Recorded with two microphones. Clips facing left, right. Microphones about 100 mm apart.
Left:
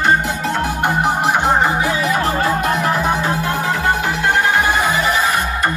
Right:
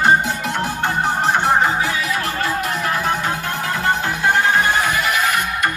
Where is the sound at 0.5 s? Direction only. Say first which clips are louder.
Left 5 dB; 10° left (ahead or behind).